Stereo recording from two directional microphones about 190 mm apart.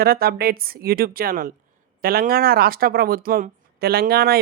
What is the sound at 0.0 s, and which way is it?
Speech, 55° right (ahead or behind).